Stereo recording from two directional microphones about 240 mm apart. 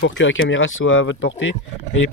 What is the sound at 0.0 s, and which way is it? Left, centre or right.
Speech, left.